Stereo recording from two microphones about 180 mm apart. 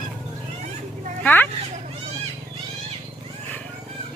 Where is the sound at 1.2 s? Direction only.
10° left (ahead or behind).